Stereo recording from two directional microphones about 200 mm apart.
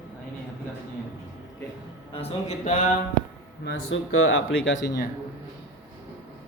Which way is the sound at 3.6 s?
75° left (ahead or behind).